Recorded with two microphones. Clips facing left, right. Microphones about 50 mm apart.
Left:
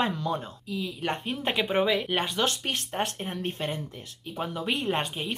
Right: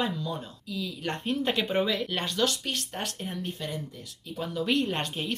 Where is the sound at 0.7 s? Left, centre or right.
Left.